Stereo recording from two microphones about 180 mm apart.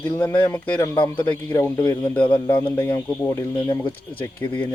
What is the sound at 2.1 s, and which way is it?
Speech, 10° left (ahead or behind).